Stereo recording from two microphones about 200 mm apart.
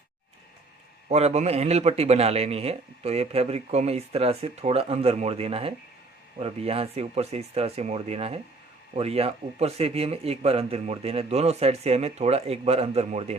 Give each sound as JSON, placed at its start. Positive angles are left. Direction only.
{"t": 1.0, "sound": "a man's voice", "side_deg": -30}